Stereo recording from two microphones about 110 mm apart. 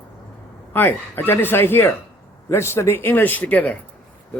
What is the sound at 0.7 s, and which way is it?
A man's voice, 20° left (ahead or behind).